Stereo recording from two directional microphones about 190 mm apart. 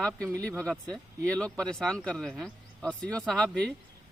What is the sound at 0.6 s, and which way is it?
Speech, 5° left (ahead or behind).